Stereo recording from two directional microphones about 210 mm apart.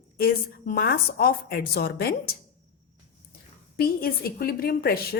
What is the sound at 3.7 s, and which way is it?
A woman's voice, 45° left (ahead or behind).